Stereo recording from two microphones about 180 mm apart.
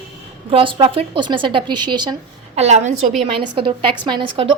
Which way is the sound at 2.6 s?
40° right (ahead or behind).